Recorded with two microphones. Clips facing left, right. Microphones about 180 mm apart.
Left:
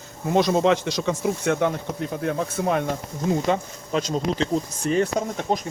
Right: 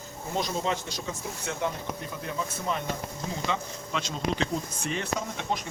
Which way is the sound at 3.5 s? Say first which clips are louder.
Left 8 dB; 40° left (ahead or behind).